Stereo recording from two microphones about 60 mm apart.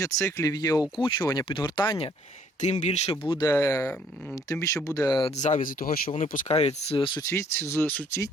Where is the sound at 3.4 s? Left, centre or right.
Left.